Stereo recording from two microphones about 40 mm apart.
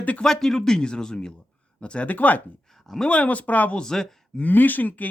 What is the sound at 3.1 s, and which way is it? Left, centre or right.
Speech, left.